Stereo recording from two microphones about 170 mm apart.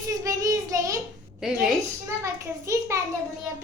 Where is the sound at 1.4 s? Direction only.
5° right (ahead or behind).